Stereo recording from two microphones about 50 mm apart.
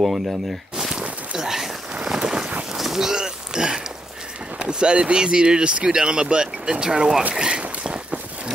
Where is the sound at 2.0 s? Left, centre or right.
Centre.